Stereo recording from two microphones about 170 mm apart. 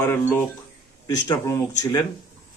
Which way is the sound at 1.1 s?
20° left (ahead or behind).